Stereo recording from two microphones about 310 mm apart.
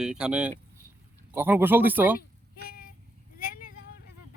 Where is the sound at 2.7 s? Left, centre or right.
Left.